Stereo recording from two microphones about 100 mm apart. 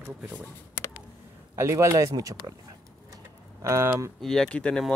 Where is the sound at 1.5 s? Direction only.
30° right (ahead or behind).